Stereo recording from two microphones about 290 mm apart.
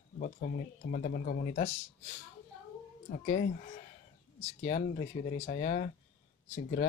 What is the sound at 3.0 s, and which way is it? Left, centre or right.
Speech, left.